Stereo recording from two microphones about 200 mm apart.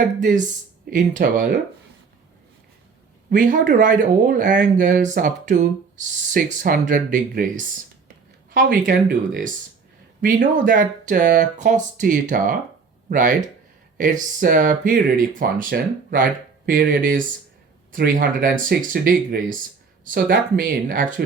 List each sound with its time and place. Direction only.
0.2 s speech: 40° right (ahead or behind)
3.2 s speech: 40° right (ahead or behind)